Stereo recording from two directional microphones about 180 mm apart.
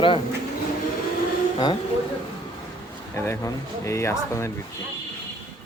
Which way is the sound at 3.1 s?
15° left (ahead or behind).